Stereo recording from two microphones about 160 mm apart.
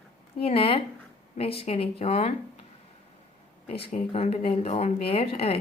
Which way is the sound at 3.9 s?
40° left (ahead or behind).